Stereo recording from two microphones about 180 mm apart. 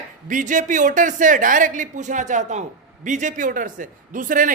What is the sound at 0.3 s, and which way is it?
A woman's voice, 45° right (ahead or behind).